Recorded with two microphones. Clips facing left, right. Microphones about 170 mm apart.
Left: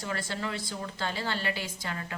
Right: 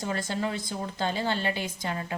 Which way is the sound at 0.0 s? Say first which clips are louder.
Right 4 dB; 20° right (ahead or behind).